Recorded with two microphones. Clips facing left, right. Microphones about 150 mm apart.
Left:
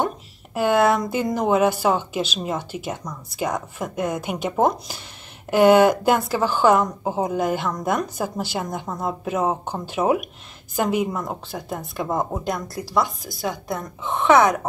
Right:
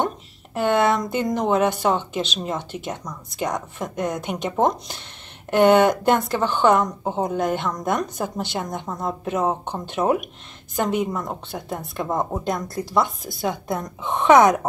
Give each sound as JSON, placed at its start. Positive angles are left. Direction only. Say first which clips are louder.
{"t": 0.6, "sound": "a woman's voice", "louder": "left 1 dB", "side_deg": 5}
{"t": 13.4, "sound": "a woman's voice", "louder": "right 2 dB", "side_deg": -20}